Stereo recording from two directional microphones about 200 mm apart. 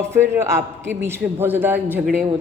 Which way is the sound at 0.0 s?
15° right (ahead or behind).